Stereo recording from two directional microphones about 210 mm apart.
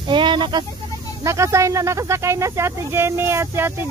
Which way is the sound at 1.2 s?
15° right (ahead or behind).